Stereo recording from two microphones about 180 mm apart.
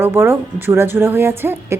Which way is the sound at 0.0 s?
15° right (ahead or behind).